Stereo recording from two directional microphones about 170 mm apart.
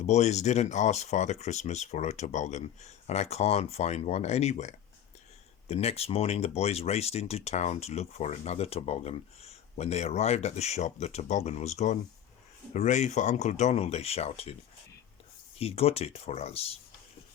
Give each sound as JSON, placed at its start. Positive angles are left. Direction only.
{"t": 0.0, "sound": "speech", "side_deg": 40}
{"t": 15.5, "sound": "speech", "side_deg": 35}